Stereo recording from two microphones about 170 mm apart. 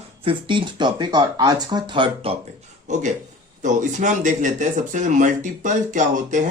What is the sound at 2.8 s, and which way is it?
Speech, 45° right (ahead or behind).